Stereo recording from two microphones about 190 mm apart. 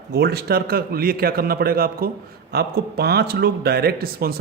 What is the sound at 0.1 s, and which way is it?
A man's voice, 60° right (ahead or behind).